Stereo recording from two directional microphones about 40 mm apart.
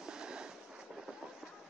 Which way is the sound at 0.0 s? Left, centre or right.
Centre.